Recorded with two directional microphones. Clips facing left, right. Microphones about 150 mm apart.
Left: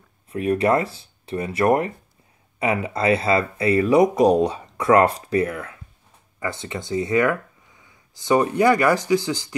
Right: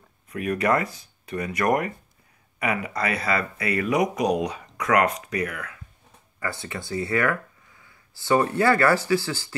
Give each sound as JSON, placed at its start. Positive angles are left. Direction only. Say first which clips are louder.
{"t": 0.3, "sound": "speech", "louder": "left 4 dB", "side_deg": 30}